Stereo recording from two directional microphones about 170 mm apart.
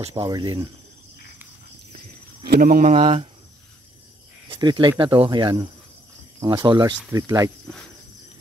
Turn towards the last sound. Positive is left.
turn(degrees=-20)  # may be behind; listen again after turning